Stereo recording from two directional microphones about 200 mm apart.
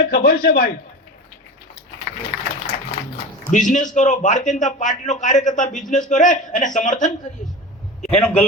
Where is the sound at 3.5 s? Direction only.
40° left (ahead or behind).